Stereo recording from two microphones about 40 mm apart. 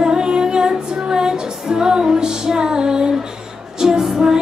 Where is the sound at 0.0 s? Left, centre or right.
Centre.